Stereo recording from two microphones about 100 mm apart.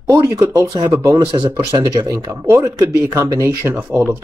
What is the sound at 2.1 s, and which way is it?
Speech, 30° right (ahead or behind).